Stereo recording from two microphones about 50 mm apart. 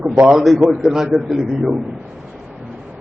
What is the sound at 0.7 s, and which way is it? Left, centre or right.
A man's voice, centre.